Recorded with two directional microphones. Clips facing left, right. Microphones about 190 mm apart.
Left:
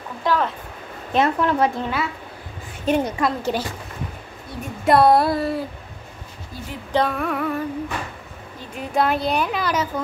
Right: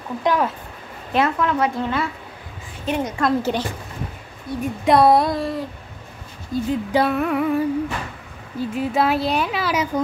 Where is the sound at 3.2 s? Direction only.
5° left (ahead or behind).